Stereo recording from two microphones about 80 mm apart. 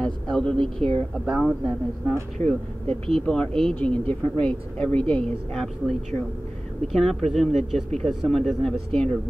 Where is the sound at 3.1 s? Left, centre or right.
Centre.